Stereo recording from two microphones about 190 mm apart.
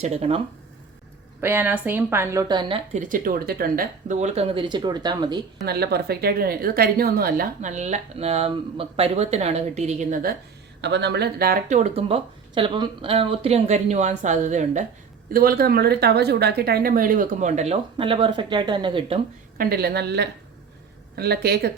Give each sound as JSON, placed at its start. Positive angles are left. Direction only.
{"t": 0.0, "sound": "a woman's voice", "side_deg": -35}
{"t": 1.4, "sound": "a woman's voice", "side_deg": -10}
{"t": 3.0, "sound": "a woman's voice", "side_deg": -45}
{"t": 5.6, "sound": "a woman's voice", "side_deg": -55}
{"t": 10.8, "sound": "a woman's voice", "side_deg": -65}
{"t": 15.3, "sound": "speech", "side_deg": -50}
{"t": 19.5, "sound": "a woman's voice", "side_deg": -55}